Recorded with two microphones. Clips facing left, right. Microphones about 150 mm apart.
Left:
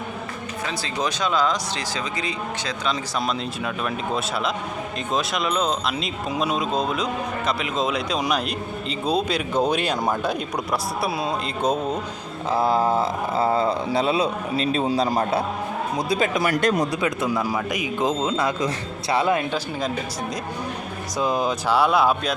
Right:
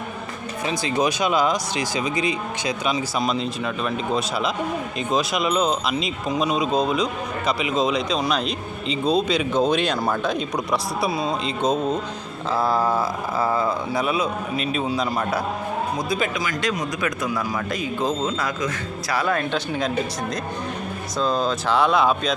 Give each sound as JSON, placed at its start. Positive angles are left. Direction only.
{"t": 1.0, "sound": "speech", "side_deg": -10}
{"t": 3.2, "sound": "speech", "side_deg": 0}
{"t": 12.5, "sound": "speech", "side_deg": 20}
{"t": 16.4, "sound": "speech", "side_deg": 55}
{"t": 17.0, "sound": "speech", "side_deg": 30}
{"t": 17.5, "sound": "speech", "side_deg": 15}
{"t": 21.2, "sound": "speech", "side_deg": 15}